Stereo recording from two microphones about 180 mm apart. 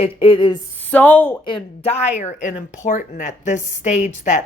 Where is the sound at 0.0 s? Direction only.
25° left (ahead or behind).